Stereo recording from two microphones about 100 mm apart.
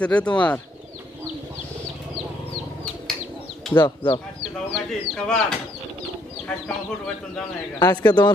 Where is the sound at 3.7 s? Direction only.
50° left (ahead or behind).